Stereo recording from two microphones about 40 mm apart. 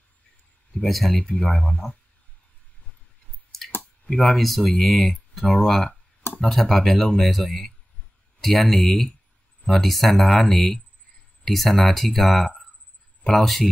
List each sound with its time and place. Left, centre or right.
0.8 s speech: centre
1.1 s speech: left
4.4 s speech: centre
9.8 s speech: centre